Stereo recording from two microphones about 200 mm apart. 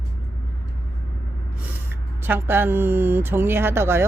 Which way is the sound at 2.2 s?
10° right (ahead or behind).